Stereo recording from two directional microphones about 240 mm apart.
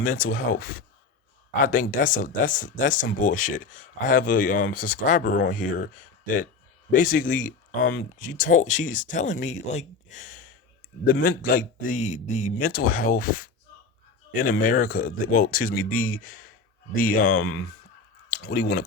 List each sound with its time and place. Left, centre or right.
0.0 s speech: left